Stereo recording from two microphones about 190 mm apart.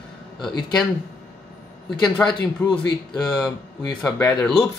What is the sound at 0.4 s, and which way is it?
Speech, 25° left (ahead or behind).